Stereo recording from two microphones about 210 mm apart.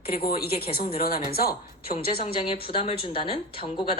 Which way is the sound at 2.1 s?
25° left (ahead or behind).